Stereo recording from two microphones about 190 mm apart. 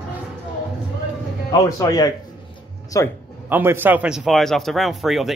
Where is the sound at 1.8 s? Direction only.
20° left (ahead or behind).